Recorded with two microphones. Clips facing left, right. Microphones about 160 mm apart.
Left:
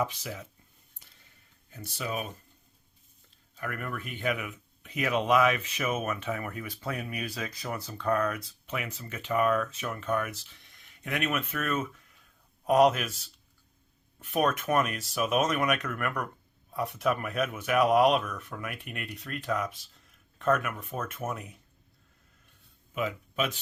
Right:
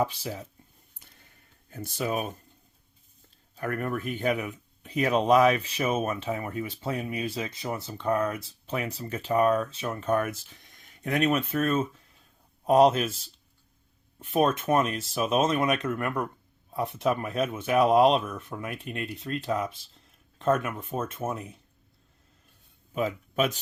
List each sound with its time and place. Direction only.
0.0 s speech: 30° right (ahead or behind)
1.7 s speech: 50° right (ahead or behind)
3.5 s speech: 40° right (ahead or behind)
10.1 s speech: 45° right (ahead or behind)
14.2 s speech: 30° right (ahead or behind)
23.0 s speech: 40° right (ahead or behind)